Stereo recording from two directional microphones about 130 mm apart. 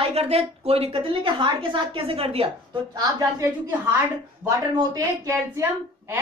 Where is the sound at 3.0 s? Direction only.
25° right (ahead or behind).